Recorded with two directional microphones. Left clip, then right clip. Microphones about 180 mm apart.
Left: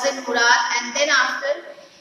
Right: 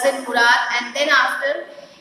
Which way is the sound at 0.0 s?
15° right (ahead or behind).